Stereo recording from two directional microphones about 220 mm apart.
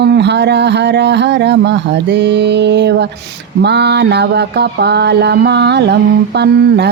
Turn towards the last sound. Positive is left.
turn(degrees=-50)  # may be behind; listen again after turning